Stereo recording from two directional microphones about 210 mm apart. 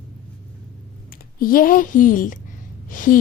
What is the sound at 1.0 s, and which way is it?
A woman's voice, 45° left (ahead or behind).